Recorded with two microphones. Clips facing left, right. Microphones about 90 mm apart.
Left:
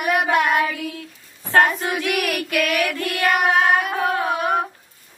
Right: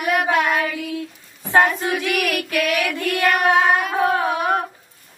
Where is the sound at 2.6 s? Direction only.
15° right (ahead or behind).